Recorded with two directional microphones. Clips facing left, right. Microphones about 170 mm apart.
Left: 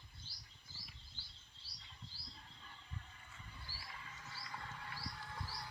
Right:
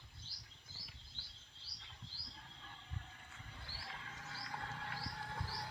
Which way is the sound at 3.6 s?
65° right (ahead or behind).